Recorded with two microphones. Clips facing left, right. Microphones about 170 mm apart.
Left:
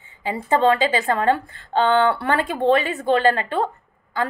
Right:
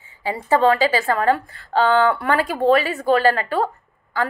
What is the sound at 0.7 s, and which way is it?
A woman's voice, 25° left (ahead or behind).